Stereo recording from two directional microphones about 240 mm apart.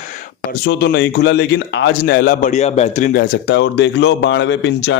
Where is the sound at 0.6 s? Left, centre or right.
Left.